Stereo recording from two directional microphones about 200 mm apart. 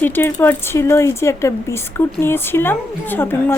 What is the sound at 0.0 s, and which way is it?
A woman's voice, 10° left (ahead or behind).